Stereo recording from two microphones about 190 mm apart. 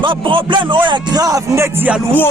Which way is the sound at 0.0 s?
25° right (ahead or behind).